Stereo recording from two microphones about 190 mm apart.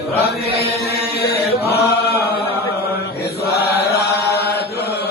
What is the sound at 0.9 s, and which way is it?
Chant, 55° left (ahead or behind).